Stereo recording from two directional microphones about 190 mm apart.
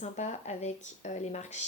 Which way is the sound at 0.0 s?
40° left (ahead or behind).